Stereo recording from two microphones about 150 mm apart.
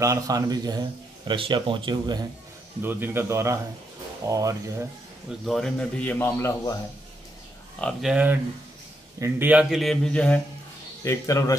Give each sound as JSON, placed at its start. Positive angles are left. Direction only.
{"t": 0.0, "sound": "a man's voice", "side_deg": -20}
{"t": 2.8, "sound": "a man's voice", "side_deg": -15}
{"t": 5.4, "sound": "a man's voice", "side_deg": 0}
{"t": 7.8, "sound": "a man's voice", "side_deg": -5}
{"t": 11.1, "sound": "speech", "side_deg": 20}